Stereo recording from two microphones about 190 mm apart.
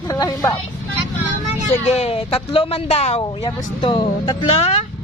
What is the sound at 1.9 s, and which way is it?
Speech, 30° left (ahead or behind).